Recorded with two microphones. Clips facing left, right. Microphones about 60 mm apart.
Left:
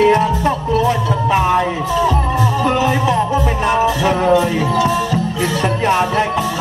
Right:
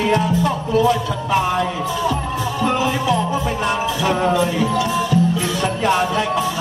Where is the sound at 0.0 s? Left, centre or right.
Left.